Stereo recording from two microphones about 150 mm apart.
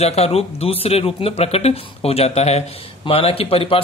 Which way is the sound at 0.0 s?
45° left (ahead or behind).